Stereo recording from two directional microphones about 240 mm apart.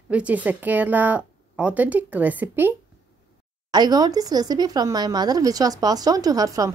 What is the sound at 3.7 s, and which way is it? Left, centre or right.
Speech, centre.